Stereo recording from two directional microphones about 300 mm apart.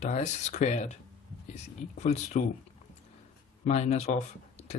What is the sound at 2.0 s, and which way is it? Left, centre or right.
Speech, left.